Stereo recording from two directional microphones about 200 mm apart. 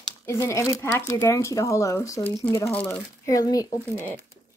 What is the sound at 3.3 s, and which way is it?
Speech, 15° left (ahead or behind).